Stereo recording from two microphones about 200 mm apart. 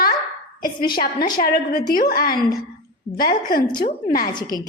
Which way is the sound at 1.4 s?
45° left (ahead or behind).